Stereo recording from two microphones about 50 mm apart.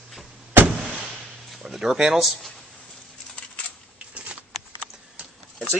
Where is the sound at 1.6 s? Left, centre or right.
Centre.